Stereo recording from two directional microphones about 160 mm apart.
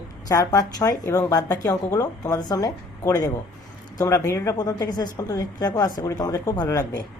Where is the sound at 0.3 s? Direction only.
20° left (ahead or behind).